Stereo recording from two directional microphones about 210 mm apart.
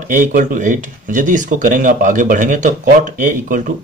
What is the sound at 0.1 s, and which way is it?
Speech, 40° right (ahead or behind).